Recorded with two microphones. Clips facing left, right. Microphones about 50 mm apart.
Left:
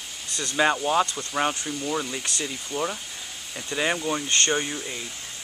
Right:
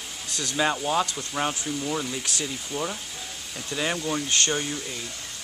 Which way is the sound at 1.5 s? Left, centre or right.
Centre.